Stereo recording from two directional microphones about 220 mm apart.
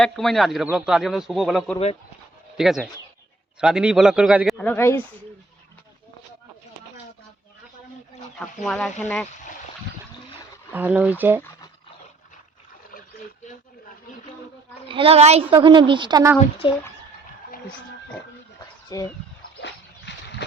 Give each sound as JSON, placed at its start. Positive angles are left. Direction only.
{"t": 0.0, "sound": "speech", "side_deg": 0}
{"t": 4.5, "sound": "speech", "side_deg": 10}
{"t": 8.4, "sound": "speech", "side_deg": 5}
{"t": 10.7, "sound": "speech", "side_deg": -10}
{"t": 14.8, "sound": "a woman's voice", "side_deg": -25}
{"t": 16.6, "sound": "speech", "side_deg": 20}
{"t": 18.9, "sound": "speech", "side_deg": 15}
{"t": 19.6, "sound": "a sound", "side_deg": 50}